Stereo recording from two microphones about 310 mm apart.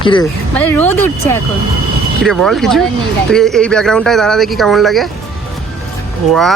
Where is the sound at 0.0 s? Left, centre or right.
Centre.